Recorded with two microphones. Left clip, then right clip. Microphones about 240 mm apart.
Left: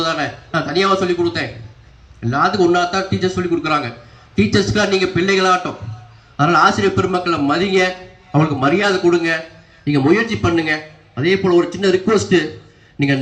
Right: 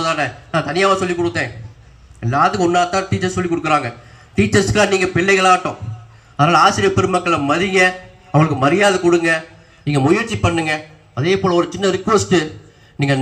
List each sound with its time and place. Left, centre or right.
0.0 s a man's voice: right